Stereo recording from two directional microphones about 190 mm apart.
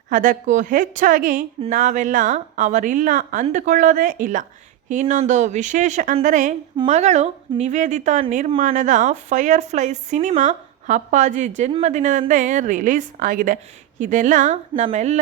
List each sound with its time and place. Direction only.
0.1 s a woman's voice: 45° right (ahead or behind)